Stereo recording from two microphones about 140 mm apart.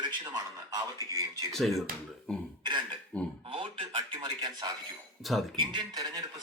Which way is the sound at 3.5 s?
40° right (ahead or behind).